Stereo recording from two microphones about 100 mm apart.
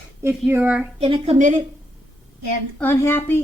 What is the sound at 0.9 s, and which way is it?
Speech, 80° right.